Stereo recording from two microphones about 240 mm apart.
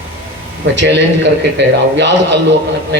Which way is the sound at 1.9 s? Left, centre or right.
Right.